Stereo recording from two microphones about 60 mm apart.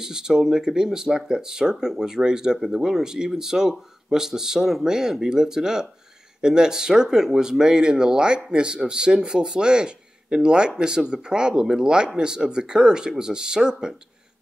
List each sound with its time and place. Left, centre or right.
0.0 s speech: centre